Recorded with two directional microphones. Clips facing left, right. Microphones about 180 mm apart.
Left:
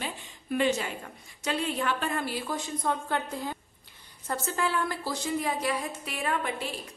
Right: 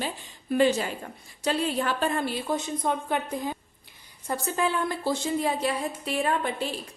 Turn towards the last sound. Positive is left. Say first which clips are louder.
# right 4 dB
turn(degrees=-30)  # may be behind; listen again after turning